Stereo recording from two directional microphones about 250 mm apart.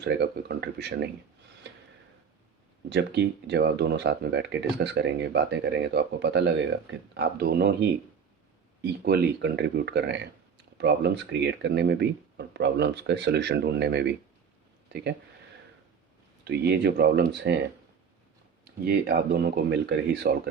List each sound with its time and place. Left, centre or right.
0.0 s speech: right
2.9 s speech: right
14.8 s a sound: right
16.4 s speech: right
18.9 s speech: right